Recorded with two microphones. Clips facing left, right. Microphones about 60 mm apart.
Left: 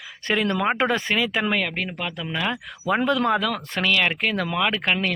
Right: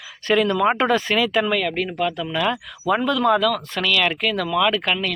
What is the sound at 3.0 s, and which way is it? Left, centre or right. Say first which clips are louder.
Speech: right 3 dB; left.